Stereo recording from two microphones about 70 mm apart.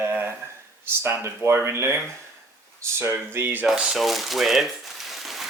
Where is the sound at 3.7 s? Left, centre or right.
Centre.